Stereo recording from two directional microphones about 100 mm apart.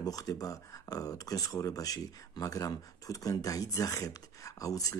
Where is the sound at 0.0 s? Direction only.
40° left (ahead or behind).